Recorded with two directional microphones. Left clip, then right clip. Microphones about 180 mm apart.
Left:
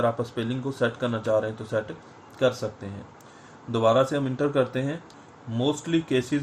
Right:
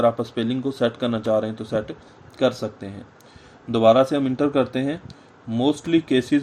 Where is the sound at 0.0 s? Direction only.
55° right (ahead or behind).